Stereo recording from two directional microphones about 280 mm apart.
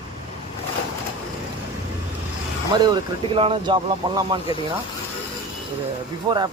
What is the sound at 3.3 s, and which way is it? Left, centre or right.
Speech, centre.